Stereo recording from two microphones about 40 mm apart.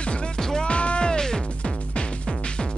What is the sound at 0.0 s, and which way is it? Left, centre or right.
Music, left.